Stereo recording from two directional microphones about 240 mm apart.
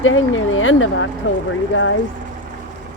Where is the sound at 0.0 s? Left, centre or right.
Left.